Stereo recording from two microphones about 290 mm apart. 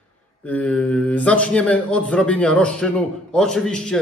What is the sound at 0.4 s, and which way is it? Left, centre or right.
A man's voice, centre.